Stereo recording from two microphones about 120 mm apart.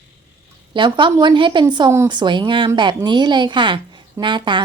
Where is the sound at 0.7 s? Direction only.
45° right (ahead or behind).